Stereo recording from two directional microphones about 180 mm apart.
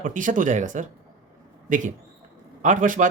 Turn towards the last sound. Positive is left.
turn(degrees=-45)  # may be behind; listen again after turning